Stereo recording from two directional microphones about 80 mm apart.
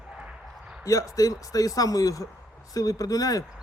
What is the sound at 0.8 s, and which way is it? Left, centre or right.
Speech, left.